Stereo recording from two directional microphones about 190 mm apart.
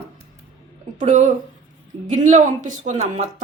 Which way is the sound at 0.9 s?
40° right (ahead or behind).